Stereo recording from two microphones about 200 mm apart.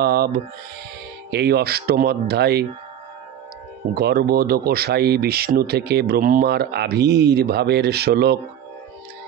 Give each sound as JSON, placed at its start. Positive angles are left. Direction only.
{"t": 0.0, "sound": "speech", "side_deg": -55}
{"t": 3.9, "sound": "speech", "side_deg": -50}